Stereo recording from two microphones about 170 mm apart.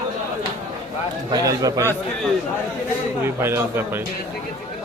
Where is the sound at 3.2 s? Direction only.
15° right (ahead or behind).